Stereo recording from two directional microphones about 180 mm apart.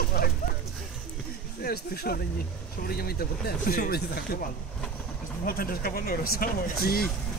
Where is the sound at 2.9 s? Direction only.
60° left (ahead or behind).